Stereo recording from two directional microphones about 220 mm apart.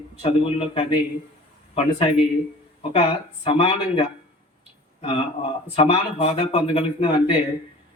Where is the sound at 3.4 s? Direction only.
25° left (ahead or behind).